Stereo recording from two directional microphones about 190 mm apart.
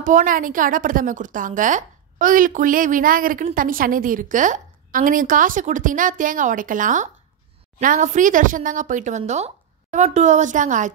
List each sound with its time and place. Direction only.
0.0 s a woman's voice: 45° right (ahead or behind)